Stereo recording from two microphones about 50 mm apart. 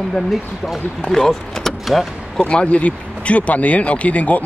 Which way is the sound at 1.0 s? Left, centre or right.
Centre.